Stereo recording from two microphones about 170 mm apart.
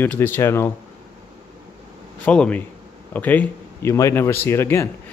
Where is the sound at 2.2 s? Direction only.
5° left (ahead or behind).